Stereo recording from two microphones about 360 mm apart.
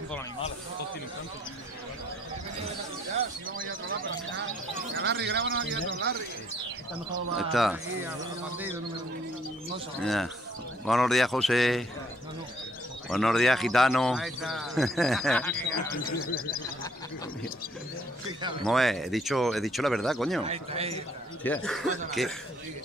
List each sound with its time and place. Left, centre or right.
5.0 s a man's voice: right
7.3 s speech: centre
10.0 s speech: centre
13.1 s speech: centre
16.2 s a sound: left
18.6 s speech: centre
20.4 s a man's voice: centre
21.5 s speech: centre